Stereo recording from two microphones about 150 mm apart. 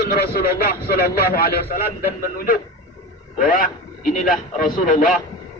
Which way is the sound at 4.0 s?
60° left (ahead or behind).